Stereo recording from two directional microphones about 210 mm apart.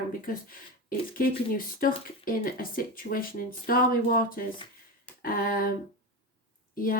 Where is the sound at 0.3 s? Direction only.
40° left (ahead or behind).